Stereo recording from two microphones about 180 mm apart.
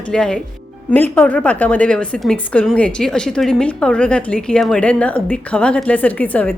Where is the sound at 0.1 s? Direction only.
5° left (ahead or behind).